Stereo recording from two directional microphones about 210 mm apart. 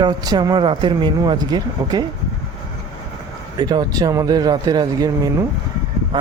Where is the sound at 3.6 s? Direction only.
20° right (ahead or behind).